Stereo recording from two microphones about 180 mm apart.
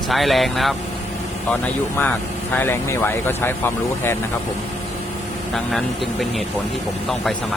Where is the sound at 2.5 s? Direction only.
15° left (ahead or behind).